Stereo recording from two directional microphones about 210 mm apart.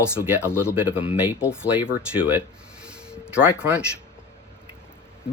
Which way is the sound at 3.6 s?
5° right (ahead or behind).